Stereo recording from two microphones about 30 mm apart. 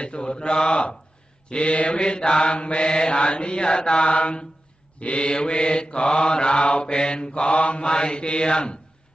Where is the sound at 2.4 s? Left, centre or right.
Left.